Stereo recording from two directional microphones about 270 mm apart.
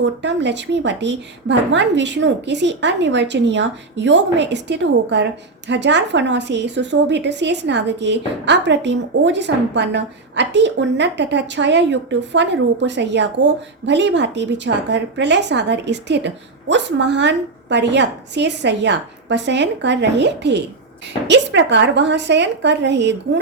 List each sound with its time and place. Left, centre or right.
0.0 s a woman's voice: right